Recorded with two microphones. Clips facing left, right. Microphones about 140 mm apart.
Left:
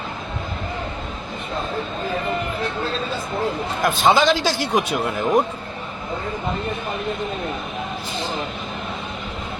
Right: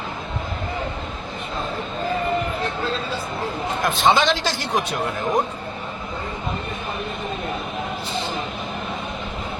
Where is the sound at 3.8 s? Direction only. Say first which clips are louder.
Left 2 dB; centre (ahead or behind).